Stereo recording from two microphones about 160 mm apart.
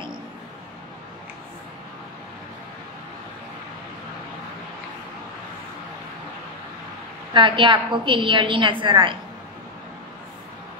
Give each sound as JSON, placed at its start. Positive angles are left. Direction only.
{"t": 7.3, "sound": "a woman's voice", "side_deg": -30}